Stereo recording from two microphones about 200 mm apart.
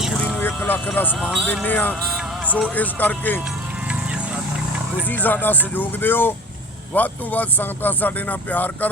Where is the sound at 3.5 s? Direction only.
5° right (ahead or behind).